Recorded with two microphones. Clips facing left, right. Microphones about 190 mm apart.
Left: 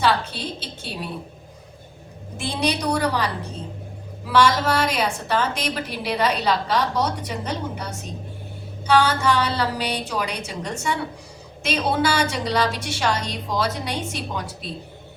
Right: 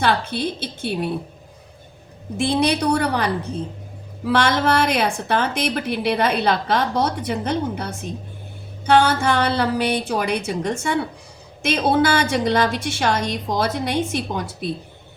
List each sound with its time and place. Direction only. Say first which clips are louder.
0.0 s a woman's voice: right 2 dB; 55° right (ahead or behind)
2.4 s a woman's voice: right 5 dB; 60° right (ahead or behind)
4.3 s a woman's voice: right 1 dB; 55° right (ahead or behind)